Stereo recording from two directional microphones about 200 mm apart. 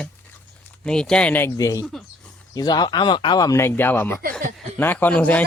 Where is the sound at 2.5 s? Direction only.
20° left (ahead or behind).